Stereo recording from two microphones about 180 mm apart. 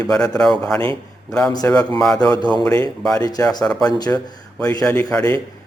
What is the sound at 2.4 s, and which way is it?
Speech, 25° right (ahead or behind).